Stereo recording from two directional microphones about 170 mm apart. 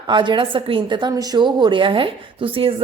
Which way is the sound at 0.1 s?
30° right (ahead or behind).